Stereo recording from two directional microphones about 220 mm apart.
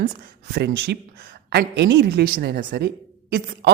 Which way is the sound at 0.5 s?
50° right (ahead or behind).